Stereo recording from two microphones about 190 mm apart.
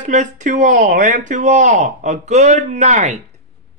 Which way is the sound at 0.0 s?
40° right (ahead or behind).